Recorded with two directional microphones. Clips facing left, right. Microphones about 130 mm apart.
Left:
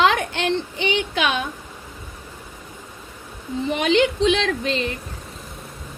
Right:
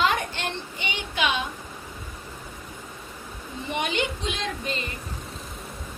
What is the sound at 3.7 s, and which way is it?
A woman's voice, 90° left.